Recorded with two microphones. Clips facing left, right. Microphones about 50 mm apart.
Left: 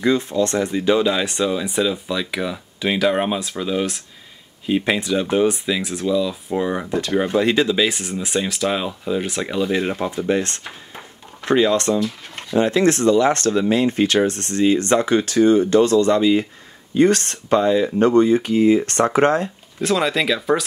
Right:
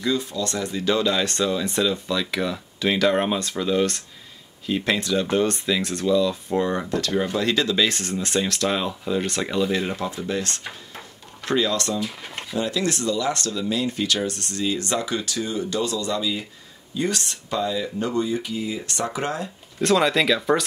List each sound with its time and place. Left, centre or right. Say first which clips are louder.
0.0 s speech: left 6 dB; left; by 4.0 s centre
4.6 s speech: left 4 dB; centre
6.9 s speech: left 4 dB; centre
10.1 s speech: left 7 dB; left
11.0 s drawer open or close: left 2 dB; left
12.0 s speech: left 5 dB; centre
12.5 s speech: left 8 dB; left
19.8 s speech: even; centre